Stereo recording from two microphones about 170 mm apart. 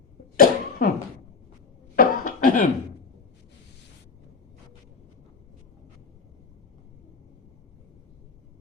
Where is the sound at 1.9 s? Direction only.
50° left (ahead or behind).